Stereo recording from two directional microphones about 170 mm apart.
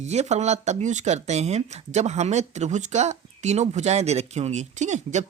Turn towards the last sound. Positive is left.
turn(degrees=-45)  # may be behind; listen again after turning